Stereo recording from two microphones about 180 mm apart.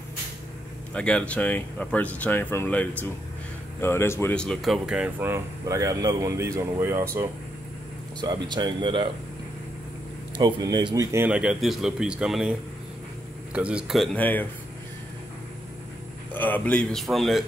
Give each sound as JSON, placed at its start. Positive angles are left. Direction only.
{"t": 0.9, "sound": "speech", "side_deg": 5}
{"t": 8.2, "sound": "speech", "side_deg": -25}
{"t": 10.3, "sound": "speech", "side_deg": -25}
{"t": 16.3, "sound": "speech", "side_deg": 10}